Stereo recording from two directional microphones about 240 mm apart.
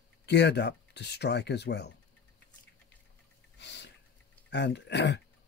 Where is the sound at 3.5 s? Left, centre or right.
Left.